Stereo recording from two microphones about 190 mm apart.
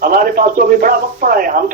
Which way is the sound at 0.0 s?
50° right (ahead or behind).